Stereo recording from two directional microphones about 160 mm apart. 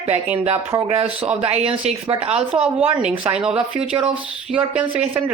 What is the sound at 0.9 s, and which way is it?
A woman's voice, 40° right (ahead or behind).